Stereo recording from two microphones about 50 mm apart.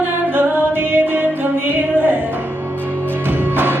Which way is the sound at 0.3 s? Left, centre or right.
Right.